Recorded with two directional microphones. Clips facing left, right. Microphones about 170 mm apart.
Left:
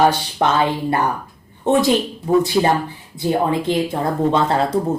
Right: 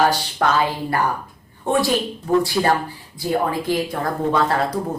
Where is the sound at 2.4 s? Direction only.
20° left (ahead or behind).